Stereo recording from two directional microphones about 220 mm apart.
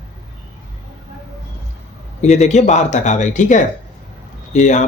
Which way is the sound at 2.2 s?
30° left (ahead or behind).